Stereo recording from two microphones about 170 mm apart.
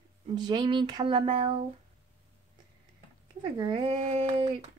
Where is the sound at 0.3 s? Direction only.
25° right (ahead or behind).